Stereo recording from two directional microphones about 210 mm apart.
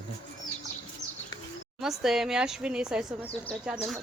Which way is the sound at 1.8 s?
Centre (ahead or behind).